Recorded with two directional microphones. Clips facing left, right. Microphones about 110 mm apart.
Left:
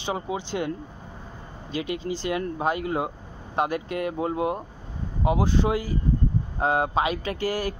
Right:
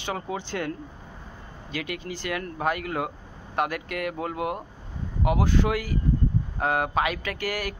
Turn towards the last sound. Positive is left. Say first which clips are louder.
# left 3 dB
turn(degrees=25)  # may be behind; listen again after turning